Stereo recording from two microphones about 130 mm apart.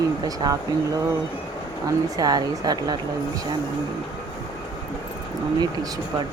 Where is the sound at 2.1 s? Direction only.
30° right (ahead or behind).